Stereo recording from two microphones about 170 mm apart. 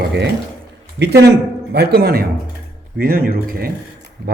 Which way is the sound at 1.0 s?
75° right (ahead or behind).